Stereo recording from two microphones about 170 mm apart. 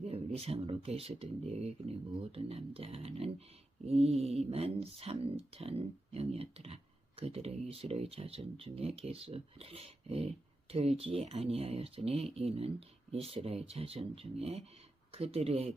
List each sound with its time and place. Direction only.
0.0 s speech: 35° right (ahead or behind)